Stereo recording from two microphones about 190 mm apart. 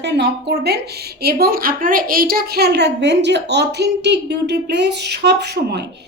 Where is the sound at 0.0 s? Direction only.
60° right (ahead or behind).